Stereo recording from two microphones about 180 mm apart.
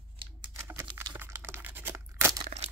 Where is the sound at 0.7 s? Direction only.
15° right (ahead or behind).